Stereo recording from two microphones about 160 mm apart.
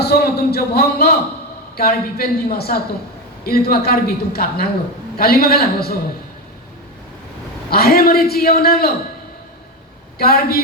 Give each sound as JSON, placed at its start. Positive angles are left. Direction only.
{"t": 0.0, "sound": "a man's voice", "side_deg": 80}
{"t": 7.7, "sound": "a man's voice", "side_deg": 70}
{"t": 10.2, "sound": "a man's voice", "side_deg": 70}